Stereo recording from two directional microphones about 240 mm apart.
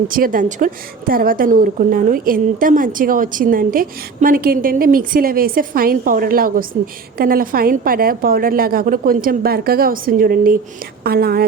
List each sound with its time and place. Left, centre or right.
0.1 s a woman's voice: right